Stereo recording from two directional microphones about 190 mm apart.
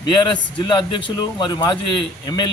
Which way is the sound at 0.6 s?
25° left (ahead or behind).